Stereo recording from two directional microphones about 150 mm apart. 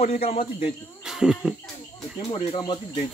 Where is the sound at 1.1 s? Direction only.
5° right (ahead or behind).